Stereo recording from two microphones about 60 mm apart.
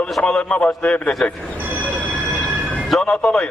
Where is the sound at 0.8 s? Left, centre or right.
Left.